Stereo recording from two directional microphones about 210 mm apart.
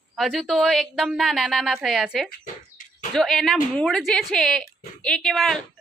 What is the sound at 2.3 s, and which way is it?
Bird, 40° left (ahead or behind).